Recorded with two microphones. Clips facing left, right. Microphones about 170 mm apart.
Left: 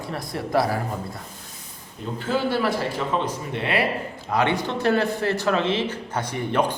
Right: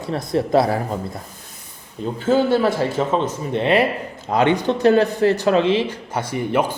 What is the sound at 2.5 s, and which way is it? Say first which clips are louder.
A man's voice: right 5 dB; 25° right (ahead or behind).